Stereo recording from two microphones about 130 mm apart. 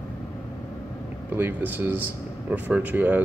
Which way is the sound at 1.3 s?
15° right (ahead or behind).